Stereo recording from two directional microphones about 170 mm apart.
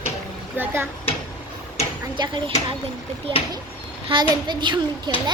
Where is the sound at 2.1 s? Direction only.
25° right (ahead or behind).